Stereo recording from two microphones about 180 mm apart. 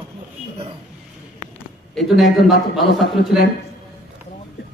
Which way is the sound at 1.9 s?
Centre (ahead or behind).